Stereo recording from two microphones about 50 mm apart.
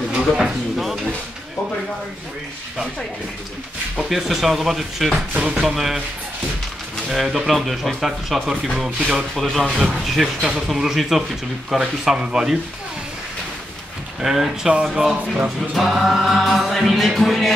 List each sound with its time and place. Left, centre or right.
0.2 s speech: centre
4.1 s speech: centre
5.3 s speech: right
7.1 s speech: centre
14.2 s speech: centre
14.7 s speech: centre
15.1 s speech: right
15.7 s speech: centre